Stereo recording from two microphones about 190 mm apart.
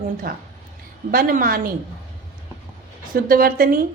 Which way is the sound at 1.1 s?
50° right (ahead or behind).